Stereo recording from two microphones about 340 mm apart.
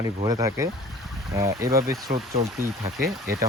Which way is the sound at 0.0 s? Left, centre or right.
Centre.